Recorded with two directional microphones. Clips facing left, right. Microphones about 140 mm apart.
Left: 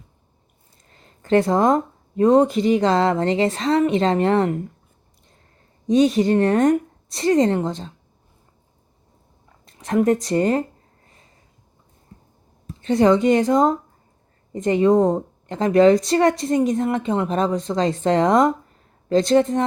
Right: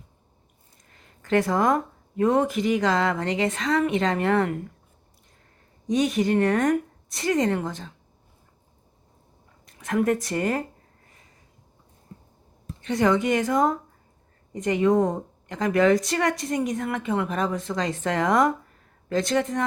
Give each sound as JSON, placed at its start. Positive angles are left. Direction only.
{"t": 0.9, "sound": "speech", "side_deg": 30}
{"t": 5.9, "sound": "speech", "side_deg": 25}
{"t": 9.6, "sound": "speech", "side_deg": 25}
{"t": 12.8, "sound": "speech", "side_deg": 25}